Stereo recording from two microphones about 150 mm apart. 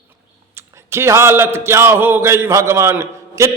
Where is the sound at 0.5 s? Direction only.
15° right (ahead or behind).